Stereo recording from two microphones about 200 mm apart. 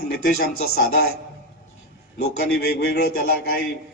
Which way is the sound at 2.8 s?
50° left (ahead or behind).